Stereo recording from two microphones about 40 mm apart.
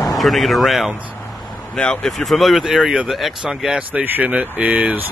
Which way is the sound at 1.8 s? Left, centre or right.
Left.